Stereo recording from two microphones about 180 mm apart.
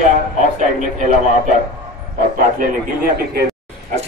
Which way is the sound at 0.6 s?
45° right (ahead or behind).